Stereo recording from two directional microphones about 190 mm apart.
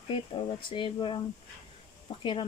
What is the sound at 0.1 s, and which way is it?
Speech, 25° left (ahead or behind).